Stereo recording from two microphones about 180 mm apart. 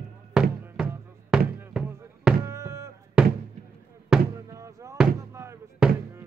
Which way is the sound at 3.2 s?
5° right (ahead or behind).